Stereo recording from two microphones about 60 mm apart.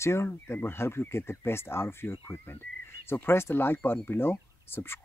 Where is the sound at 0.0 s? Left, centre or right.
Left.